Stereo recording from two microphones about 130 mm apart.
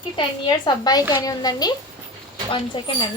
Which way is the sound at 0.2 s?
35° left (ahead or behind).